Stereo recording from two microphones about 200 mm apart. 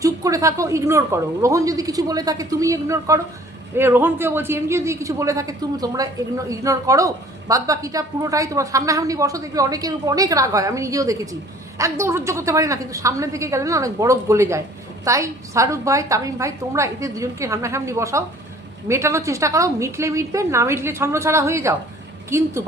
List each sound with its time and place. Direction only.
0.0 s a man's voice: 15° right (ahead or behind)